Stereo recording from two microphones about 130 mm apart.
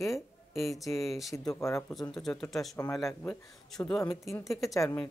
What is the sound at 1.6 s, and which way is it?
Speech, 20° left (ahead or behind).